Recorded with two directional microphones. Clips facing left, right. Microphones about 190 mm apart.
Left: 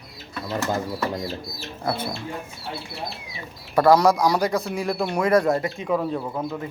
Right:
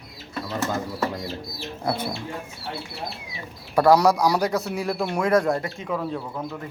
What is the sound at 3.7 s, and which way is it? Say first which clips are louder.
A man's voice: left 1 dB; 10° right (ahead or behind).